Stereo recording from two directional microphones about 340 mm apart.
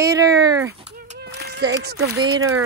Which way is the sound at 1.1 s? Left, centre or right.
Right.